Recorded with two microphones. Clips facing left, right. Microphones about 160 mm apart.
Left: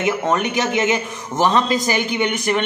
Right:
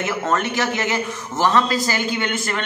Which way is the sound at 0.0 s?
15° left (ahead or behind).